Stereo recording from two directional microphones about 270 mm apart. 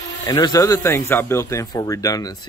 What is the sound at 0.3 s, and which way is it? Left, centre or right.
Speech, centre.